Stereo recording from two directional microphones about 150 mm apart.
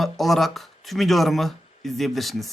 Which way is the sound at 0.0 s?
Centre (ahead or behind).